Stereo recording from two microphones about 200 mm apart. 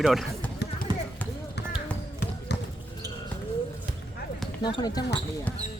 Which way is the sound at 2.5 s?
60° left (ahead or behind).